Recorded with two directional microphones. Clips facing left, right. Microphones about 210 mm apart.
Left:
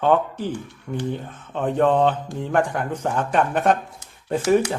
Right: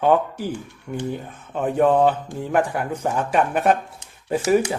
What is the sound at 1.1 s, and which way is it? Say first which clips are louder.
Speech: even; 10° right (ahead or behind).